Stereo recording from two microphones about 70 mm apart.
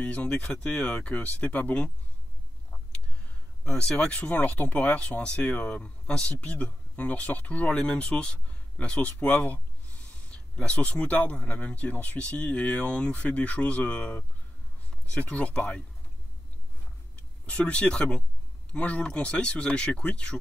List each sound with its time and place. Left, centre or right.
0.0 s speech: centre
3.6 s speech: centre
17.5 s speech: centre